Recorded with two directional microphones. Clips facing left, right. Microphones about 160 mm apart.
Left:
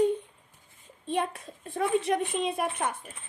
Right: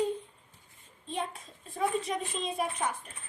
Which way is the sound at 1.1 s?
65° left (ahead or behind).